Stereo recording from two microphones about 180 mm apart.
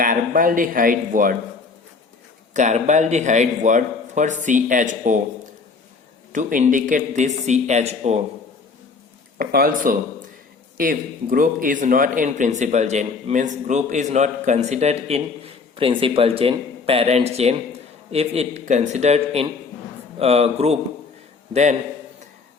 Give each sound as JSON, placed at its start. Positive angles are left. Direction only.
{"t": 0.0, "sound": "speech", "side_deg": -50}
{"t": 2.5, "sound": "a man's voice", "side_deg": -40}
{"t": 6.3, "sound": "a man's voice", "side_deg": -45}
{"t": 9.4, "sound": "a man's voice", "side_deg": -55}